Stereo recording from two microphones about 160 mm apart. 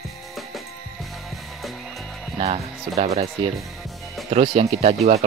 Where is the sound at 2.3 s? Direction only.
40° right (ahead or behind).